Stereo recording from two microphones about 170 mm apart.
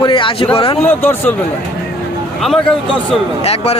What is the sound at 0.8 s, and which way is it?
Speech, 15° left (ahead or behind).